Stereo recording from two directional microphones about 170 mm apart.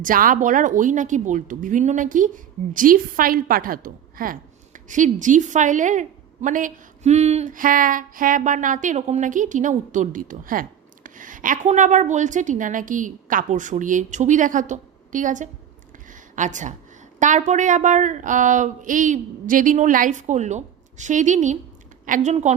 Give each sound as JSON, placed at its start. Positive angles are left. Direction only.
{"t": 0.0, "sound": "speech", "side_deg": -55}